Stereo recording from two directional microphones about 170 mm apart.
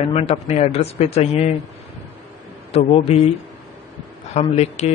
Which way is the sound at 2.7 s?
40° left (ahead or behind).